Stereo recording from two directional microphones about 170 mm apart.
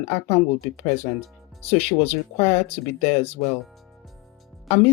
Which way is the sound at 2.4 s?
40° left (ahead or behind).